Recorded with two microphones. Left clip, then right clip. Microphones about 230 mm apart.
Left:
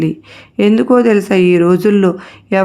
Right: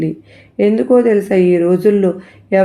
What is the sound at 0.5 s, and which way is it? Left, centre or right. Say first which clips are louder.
Speech: left 1 dB; left.